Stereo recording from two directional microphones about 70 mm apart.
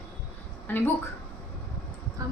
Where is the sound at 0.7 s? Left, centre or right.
Left.